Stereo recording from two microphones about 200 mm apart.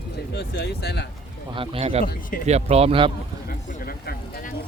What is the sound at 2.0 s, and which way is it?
Speech, 45° left (ahead or behind).